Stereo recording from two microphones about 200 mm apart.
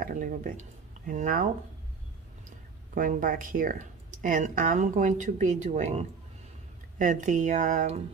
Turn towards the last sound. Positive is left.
turn(degrees=-40)  # may be behind; listen again after turning